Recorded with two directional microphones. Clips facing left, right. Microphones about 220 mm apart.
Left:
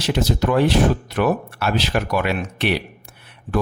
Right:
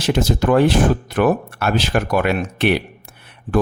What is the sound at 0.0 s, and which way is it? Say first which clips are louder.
Speech: right 2 dB; 50° right (ahead or behind).